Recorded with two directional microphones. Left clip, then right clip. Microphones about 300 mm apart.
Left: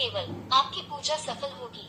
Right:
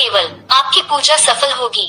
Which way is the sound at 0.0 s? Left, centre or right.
Right.